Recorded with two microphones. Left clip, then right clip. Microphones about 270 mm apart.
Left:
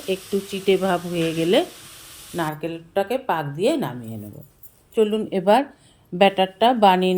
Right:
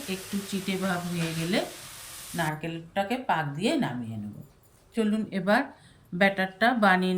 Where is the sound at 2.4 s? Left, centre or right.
Centre.